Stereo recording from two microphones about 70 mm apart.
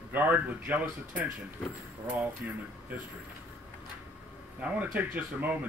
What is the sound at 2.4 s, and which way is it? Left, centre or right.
Speech, centre.